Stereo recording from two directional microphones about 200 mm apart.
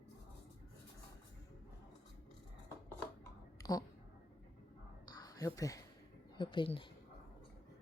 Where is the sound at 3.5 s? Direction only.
20° left (ahead or behind).